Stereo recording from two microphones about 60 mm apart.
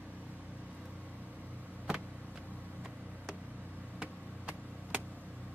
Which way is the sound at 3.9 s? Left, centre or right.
Right.